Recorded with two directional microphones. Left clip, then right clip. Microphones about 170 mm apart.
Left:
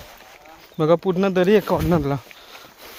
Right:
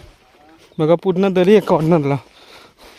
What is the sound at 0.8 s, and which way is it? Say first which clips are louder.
Speech: right 3 dB; 45° right (ahead or behind).